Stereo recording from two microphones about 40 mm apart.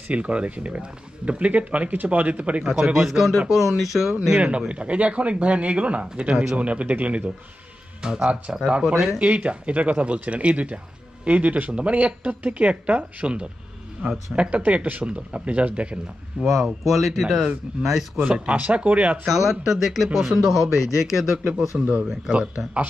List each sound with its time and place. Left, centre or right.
0.1 s speech: right
2.6 s speech: centre
4.4 s speech: right
8.0 s speech: centre
9.2 s speech: right
16.3 s speech: centre
18.3 s speech: right
19.2 s speech: centre
21.5 s speech: right
22.0 s speech: centre
22.6 s speech: right